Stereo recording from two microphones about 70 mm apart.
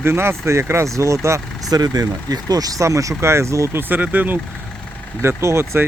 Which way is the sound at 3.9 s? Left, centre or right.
Right.